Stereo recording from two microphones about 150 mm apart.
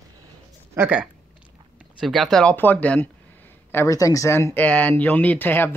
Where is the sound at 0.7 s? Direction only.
10° right (ahead or behind).